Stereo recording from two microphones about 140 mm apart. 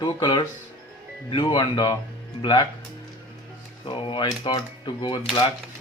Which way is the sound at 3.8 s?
35° left (ahead or behind).